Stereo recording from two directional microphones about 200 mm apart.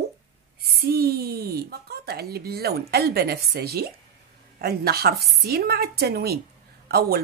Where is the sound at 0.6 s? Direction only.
50° right (ahead or behind).